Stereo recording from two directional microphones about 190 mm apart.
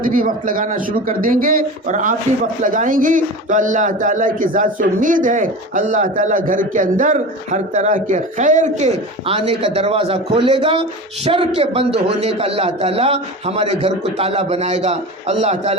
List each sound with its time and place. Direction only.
0.0 s a man's voice: 45° right (ahead or behind)